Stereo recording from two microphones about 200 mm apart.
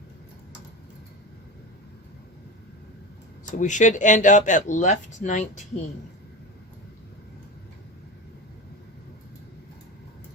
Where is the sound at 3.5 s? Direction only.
40° left (ahead or behind).